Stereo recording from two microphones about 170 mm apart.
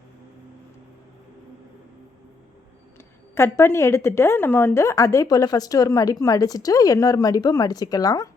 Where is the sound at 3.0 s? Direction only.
15° left (ahead or behind).